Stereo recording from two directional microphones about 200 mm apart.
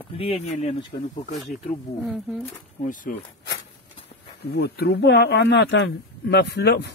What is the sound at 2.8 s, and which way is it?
Speech, 40° left (ahead or behind).